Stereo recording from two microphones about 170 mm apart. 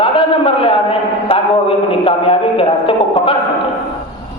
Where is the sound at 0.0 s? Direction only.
30° left (ahead or behind).